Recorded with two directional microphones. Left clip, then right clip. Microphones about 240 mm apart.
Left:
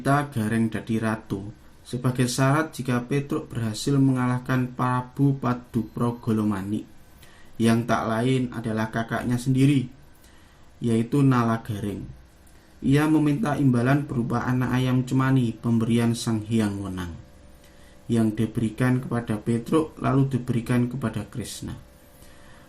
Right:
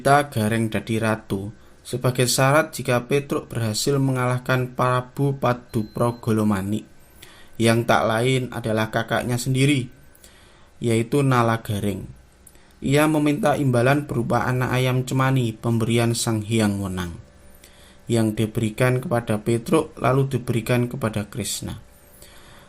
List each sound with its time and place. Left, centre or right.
0.0 s speech: right
10.8 s speech: right
18.1 s speech: right